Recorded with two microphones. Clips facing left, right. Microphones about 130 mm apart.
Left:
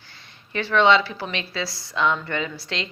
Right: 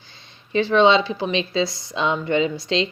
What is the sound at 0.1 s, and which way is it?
Speech, 20° right (ahead or behind).